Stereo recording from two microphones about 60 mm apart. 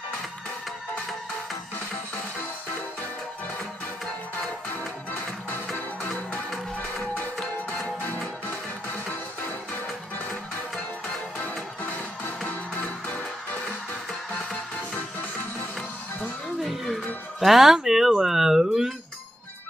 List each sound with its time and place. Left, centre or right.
4.4 s music: left
7.7 s music: left
11.8 s music: left
14.9 s music: left
16.6 s music: centre
17.4 s a sound: centre